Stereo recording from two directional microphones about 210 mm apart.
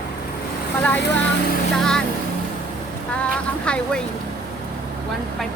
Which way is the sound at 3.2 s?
5° left (ahead or behind).